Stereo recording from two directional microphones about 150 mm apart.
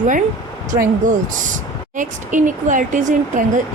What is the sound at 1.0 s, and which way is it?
A woman's voice, 60° right (ahead or behind).